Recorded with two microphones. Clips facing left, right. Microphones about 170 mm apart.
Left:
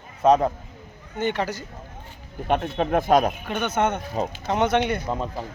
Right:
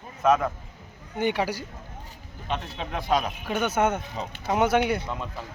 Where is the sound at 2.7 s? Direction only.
50° left (ahead or behind).